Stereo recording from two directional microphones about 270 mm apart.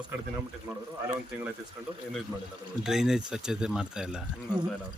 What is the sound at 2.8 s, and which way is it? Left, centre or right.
Speech, centre.